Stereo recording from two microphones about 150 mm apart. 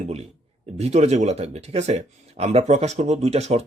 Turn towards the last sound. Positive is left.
turn(degrees=-45)  # may be behind; listen again after turning